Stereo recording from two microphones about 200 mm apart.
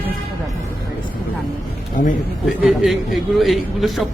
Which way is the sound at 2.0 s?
40° left (ahead or behind).